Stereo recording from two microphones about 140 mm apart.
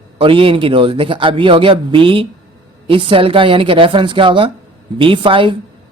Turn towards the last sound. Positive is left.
turn(degrees=-40)  # may be behind; listen again after turning